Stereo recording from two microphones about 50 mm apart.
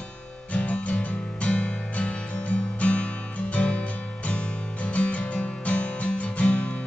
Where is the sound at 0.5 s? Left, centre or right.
Left.